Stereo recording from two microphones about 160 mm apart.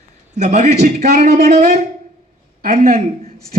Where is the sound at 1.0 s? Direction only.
85° right.